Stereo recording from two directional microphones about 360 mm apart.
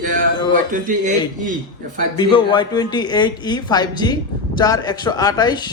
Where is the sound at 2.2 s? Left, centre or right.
Centre.